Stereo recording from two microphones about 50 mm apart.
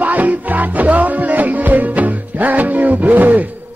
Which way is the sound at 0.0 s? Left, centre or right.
Right.